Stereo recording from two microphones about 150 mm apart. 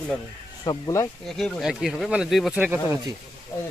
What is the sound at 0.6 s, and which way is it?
Speech, 25° left (ahead or behind).